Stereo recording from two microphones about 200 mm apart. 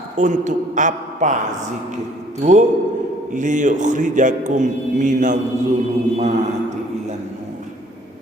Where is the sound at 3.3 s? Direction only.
40° right (ahead or behind).